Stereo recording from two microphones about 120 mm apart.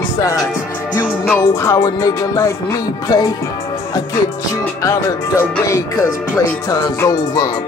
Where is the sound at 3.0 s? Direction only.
35° left (ahead or behind).